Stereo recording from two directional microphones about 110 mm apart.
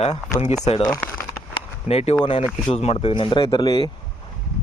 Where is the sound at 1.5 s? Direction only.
65° left (ahead or behind).